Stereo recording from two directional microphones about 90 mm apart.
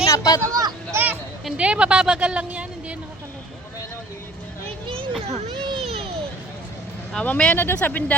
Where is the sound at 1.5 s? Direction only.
10° right (ahead or behind).